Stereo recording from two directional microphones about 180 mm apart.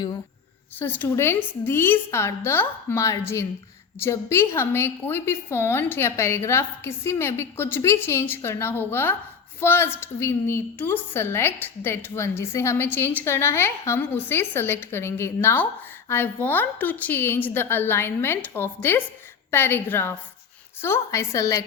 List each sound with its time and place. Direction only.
0.8 s a woman's voice: 10° left (ahead or behind)